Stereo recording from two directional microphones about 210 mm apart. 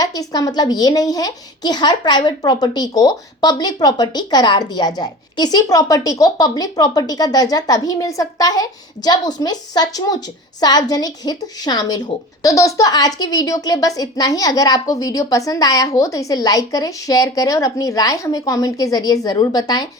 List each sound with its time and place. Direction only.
0.0 s a woman's voice: 15° left (ahead or behind)